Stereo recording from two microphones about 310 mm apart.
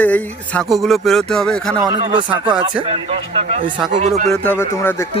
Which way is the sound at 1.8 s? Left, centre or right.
Centre.